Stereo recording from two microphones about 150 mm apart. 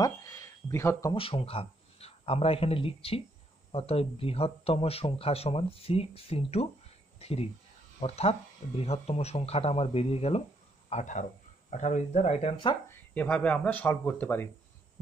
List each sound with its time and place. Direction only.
0.0 s a sound: 20° left (ahead or behind)
1.1 s a man's voice: 40° left (ahead or behind)
10.9 s speech: 50° left (ahead or behind)
13.1 s speech: 10° left (ahead or behind)